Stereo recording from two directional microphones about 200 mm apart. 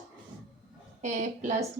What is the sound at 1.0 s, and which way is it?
Speech, 40° right (ahead or behind).